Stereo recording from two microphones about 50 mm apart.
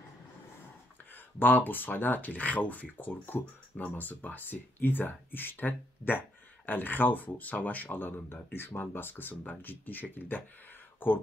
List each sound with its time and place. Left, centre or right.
1.4 s speech: left